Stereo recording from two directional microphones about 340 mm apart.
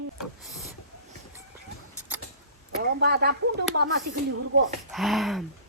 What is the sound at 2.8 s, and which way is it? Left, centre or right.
Speech, right.